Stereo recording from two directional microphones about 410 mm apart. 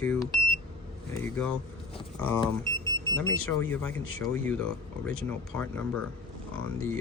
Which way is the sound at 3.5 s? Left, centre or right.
Centre.